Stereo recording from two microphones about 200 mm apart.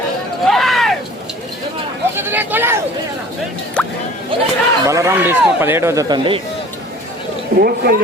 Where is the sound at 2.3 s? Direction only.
10° right (ahead or behind).